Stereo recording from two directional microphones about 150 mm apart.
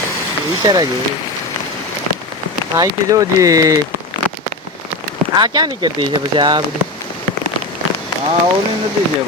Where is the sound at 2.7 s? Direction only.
15° right (ahead or behind).